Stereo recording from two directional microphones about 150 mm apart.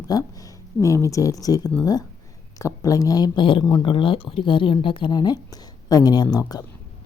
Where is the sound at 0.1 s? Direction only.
25° left (ahead or behind).